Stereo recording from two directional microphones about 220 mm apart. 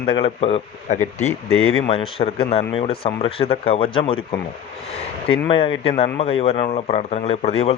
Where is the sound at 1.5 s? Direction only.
70° left (ahead or behind).